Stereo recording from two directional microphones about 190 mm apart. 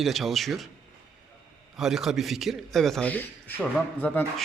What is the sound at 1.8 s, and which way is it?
A man's voice, centre (ahead or behind).